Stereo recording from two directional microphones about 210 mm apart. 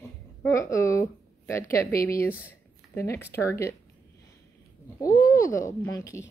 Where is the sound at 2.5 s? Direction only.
10° left (ahead or behind).